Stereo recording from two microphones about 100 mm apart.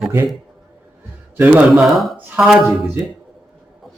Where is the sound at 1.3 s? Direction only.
15° right (ahead or behind).